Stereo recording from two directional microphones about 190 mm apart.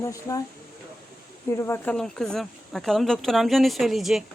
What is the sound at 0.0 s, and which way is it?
Speech, 15° left (ahead or behind).